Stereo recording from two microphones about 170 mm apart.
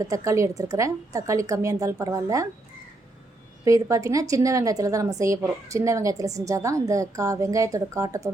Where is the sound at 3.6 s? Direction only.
20° right (ahead or behind).